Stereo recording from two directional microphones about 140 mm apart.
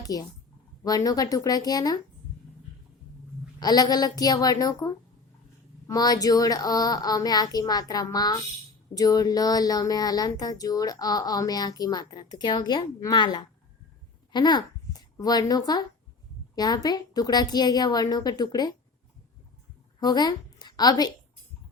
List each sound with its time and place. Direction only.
0.0 s a woman's voice: 25° left (ahead or behind)
3.6 s speech: 30° left (ahead or behind)
5.9 s speech: 25° left (ahead or behind)
20.0 s a woman's voice: 30° left (ahead or behind)